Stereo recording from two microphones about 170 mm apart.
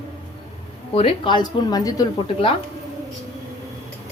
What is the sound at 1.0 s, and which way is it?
A woman's voice, 30° left (ahead or behind).